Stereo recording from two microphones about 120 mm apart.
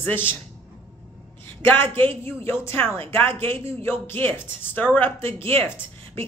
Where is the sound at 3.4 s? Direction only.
20° left (ahead or behind).